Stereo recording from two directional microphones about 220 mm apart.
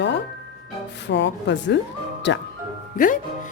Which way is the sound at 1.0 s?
55° left (ahead or behind).